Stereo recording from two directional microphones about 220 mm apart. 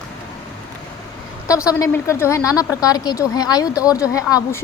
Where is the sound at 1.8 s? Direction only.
10° left (ahead or behind).